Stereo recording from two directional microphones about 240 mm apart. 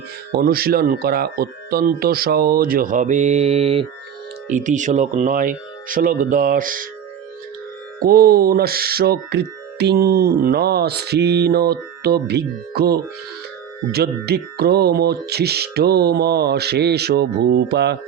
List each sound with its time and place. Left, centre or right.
0.3 s speech: right
7.9 s speech: right